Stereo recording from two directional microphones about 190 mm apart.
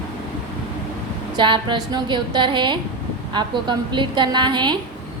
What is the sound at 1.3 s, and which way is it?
A woman's voice, 25° right (ahead or behind).